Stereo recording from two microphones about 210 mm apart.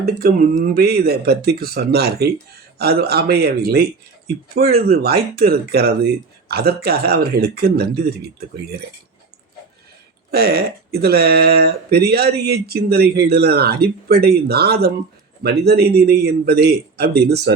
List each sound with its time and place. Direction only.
0.0 s speech: 45° right (ahead or behind)
10.3 s speech: 50° right (ahead or behind)